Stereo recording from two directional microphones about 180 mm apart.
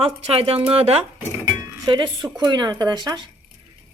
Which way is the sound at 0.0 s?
30° right (ahead or behind).